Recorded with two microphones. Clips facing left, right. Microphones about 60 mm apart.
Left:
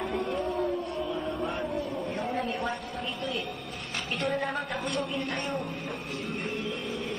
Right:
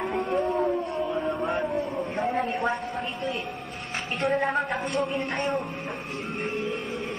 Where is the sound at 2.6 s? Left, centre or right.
Right.